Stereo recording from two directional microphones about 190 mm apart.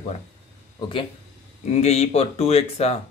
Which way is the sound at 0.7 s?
25° left (ahead or behind).